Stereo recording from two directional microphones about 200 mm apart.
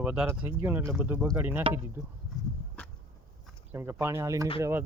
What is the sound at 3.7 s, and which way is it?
Speech, 10° right (ahead or behind).